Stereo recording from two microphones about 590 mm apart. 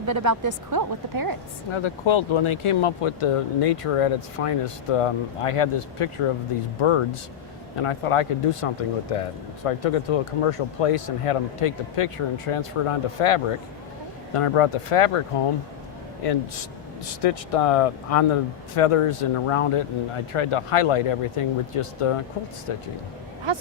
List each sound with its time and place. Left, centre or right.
0.0 s a woman's voice: right
1.7 s speech: left
16.2 s speech: left
23.5 s speech: right